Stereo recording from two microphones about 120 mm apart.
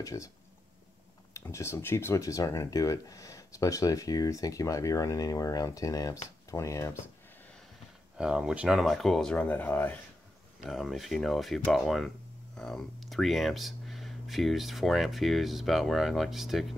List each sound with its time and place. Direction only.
0.0 s speech: 25° left (ahead or behind)
1.3 s speech: 25° left (ahead or behind)
8.2 s speech: 5° right (ahead or behind); by 9.9 s 15° left (ahead or behind)
10.6 s speech: centre (ahead or behind)